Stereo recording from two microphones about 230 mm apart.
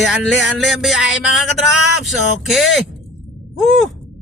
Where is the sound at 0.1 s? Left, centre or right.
Centre.